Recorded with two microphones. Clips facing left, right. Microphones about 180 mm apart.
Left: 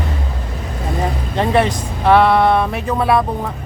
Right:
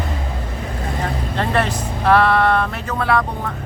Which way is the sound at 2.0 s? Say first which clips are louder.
Left 3 dB; 5° left (ahead or behind).